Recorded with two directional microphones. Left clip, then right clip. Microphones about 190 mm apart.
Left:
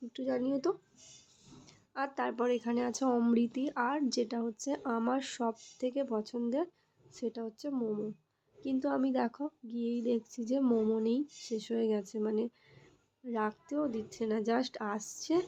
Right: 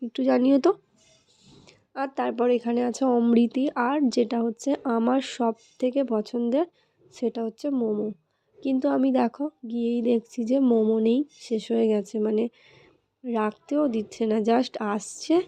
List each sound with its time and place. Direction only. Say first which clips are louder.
0.1 s speech: right 13 dB; 45° right (ahead or behind)
1.5 s speech: right 9 dB; 15° right (ahead or behind)
3.3 s a woman's voice: right 9 dB; 30° right (ahead or behind)